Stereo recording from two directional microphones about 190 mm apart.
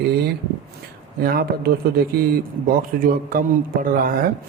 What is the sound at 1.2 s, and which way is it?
Speech, 55° right (ahead or behind).